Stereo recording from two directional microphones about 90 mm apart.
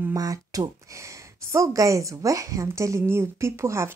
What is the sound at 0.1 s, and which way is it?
A woman's voice, 40° right (ahead or behind).